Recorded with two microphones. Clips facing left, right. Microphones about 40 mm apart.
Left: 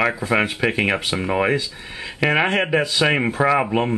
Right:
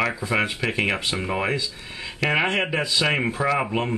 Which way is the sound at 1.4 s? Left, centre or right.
Left.